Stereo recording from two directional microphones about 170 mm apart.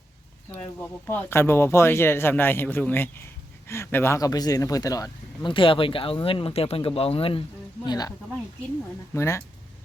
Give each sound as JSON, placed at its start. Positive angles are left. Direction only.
{"t": 0.5, "sound": "speech", "side_deg": 10}
{"t": 9.1, "sound": "speech", "side_deg": 15}